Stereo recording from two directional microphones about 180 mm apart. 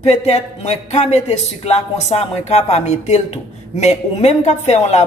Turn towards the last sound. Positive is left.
turn(degrees=40)  # may be behind; listen again after turning